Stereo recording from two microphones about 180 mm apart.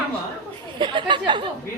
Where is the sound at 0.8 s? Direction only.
25° right (ahead or behind).